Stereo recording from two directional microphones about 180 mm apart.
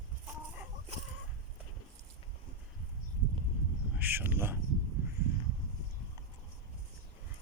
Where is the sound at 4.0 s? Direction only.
10° right (ahead or behind).